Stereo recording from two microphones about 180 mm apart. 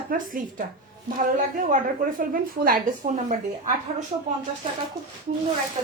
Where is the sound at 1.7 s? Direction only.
50° right (ahead or behind).